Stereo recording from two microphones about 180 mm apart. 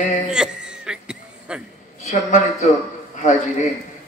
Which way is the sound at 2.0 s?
40° left (ahead or behind).